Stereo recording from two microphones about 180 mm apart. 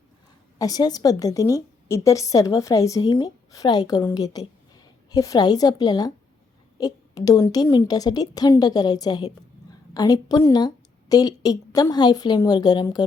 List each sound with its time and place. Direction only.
0.6 s a woman's voice: 20° left (ahead or behind)